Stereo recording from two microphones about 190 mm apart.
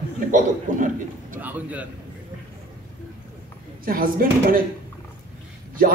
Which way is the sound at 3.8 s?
50° right (ahead or behind).